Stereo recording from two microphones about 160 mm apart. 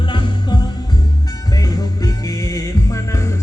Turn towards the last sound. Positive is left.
turn(degrees=20)  # may be behind; listen again after turning